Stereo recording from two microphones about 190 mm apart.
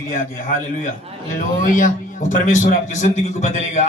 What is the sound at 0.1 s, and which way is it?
Speech, 40° left (ahead or behind).